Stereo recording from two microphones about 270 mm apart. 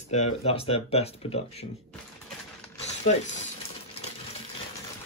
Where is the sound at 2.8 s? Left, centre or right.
Left.